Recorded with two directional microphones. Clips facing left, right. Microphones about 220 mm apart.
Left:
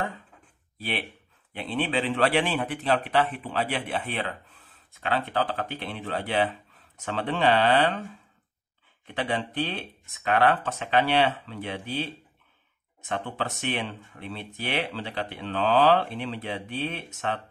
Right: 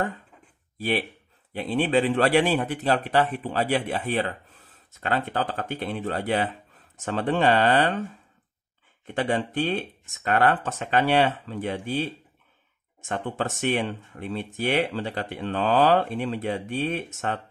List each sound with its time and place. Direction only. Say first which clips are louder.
0.7 s speech: right 6 dB; 45° right (ahead or behind)
9.0 s speech: right 4 dB; 45° right (ahead or behind)